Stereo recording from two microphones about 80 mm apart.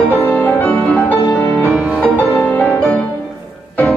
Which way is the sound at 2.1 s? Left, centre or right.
Centre.